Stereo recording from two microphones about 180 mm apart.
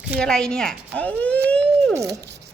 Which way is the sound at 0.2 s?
5° left (ahead or behind).